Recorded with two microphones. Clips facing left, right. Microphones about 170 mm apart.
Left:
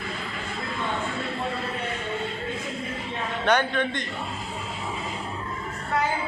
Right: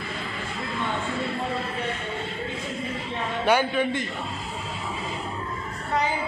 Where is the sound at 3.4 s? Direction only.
5° right (ahead or behind).